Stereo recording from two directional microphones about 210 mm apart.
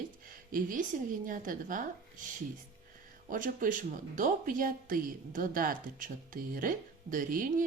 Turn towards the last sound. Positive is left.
turn(degrees=-40)  # may be behind; listen again after turning